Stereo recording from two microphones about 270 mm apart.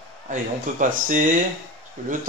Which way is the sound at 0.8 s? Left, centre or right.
Right.